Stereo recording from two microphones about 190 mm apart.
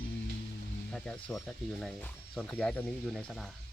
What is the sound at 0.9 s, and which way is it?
Speech, 5° left (ahead or behind).